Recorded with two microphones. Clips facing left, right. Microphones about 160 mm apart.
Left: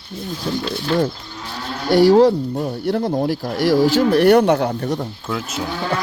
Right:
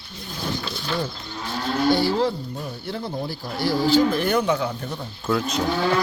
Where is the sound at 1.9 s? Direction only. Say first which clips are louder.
Left 10 dB; 85° left.